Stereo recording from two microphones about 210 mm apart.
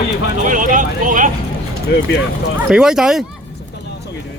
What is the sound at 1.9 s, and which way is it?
Speech, 55° left (ahead or behind).